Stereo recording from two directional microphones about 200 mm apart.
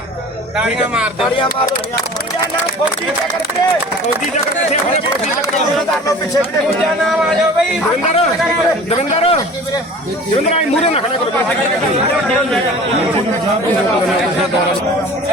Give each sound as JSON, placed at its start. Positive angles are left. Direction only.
{"t": 8.9, "sound": "a man's voice", "side_deg": 30}
{"t": 10.5, "sound": "a man's voice", "side_deg": 30}